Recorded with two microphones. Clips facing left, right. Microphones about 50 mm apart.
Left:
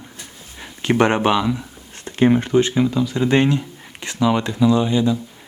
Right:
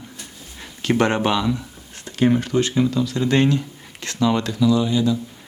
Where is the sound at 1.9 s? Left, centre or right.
Left.